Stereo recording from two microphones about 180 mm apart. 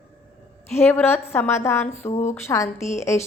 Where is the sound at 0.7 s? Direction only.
10° left (ahead or behind).